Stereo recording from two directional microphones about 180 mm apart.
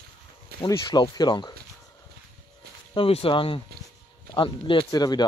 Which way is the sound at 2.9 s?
30° left (ahead or behind).